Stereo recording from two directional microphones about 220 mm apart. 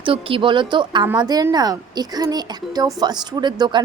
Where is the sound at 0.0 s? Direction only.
25° right (ahead or behind).